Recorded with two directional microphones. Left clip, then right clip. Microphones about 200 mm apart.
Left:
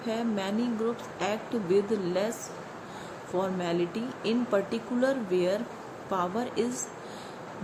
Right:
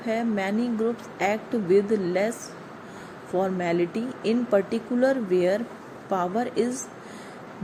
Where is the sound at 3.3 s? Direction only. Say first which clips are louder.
Right 5 dB; 15° right (ahead or behind).